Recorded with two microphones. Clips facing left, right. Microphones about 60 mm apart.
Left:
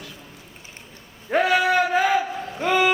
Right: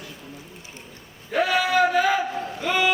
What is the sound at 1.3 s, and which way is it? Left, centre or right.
Speech, left.